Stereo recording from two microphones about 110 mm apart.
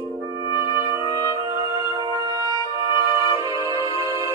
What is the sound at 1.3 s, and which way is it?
Music, 30° right (ahead or behind).